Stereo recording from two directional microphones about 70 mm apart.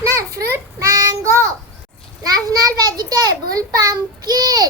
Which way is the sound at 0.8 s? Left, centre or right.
Right.